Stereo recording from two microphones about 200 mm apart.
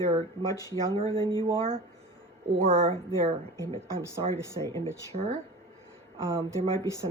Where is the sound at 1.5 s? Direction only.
25° right (ahead or behind).